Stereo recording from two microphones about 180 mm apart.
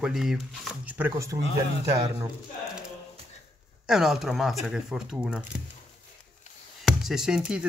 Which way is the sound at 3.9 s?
Centre (ahead or behind).